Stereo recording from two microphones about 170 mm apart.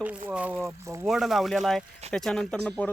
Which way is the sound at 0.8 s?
15° right (ahead or behind).